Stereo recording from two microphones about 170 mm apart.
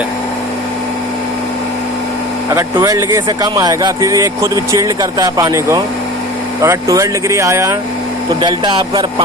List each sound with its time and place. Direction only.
2.5 s speech: 15° right (ahead or behind)
8.4 s speech: 30° right (ahead or behind)